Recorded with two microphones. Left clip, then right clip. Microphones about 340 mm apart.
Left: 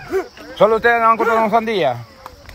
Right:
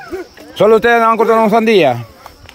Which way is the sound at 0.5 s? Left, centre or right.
Right.